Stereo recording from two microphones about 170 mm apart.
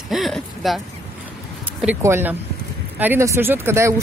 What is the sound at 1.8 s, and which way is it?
Speech, 10° right (ahead or behind).